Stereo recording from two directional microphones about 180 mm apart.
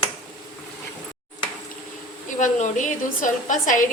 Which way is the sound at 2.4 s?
45° left (ahead or behind).